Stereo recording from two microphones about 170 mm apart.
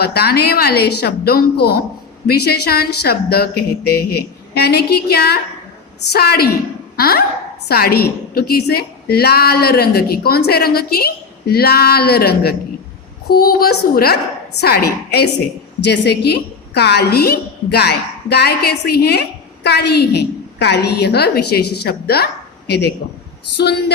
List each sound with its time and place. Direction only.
0.0 s a woman's voice: 70° left (ahead or behind)